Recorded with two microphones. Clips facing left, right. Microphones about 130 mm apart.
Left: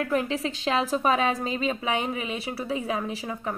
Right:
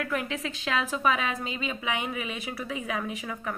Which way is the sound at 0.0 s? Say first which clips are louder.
Left 5 dB; 30° left (ahead or behind).